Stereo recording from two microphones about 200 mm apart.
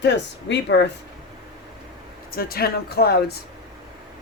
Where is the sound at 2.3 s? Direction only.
50° left (ahead or behind).